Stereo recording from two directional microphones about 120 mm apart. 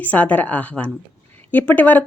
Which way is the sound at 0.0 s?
15° left (ahead or behind).